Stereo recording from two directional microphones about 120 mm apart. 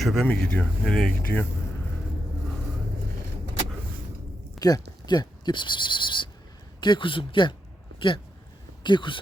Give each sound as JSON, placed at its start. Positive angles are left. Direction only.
{"t": 0.0, "sound": "speech", "side_deg": 0}
{"t": 4.6, "sound": "speech", "side_deg": 35}